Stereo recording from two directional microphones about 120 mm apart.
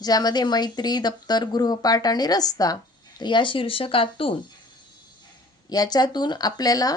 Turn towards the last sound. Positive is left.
turn(degrees=30)  # may be behind; listen again after turning